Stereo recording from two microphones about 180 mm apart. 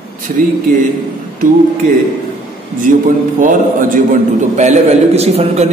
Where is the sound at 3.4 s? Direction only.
45° right (ahead or behind).